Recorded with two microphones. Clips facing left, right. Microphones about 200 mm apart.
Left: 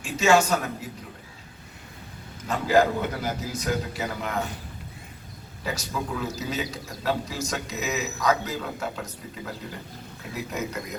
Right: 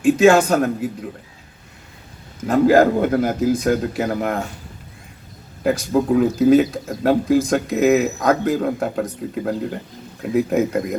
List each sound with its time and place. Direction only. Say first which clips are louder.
0.0 s speech: right 8 dB; 55° right (ahead or behind)
2.5 s speech: right 8 dB; 55° right (ahead or behind)
5.6 s speech: right 13 dB; 55° right (ahead or behind)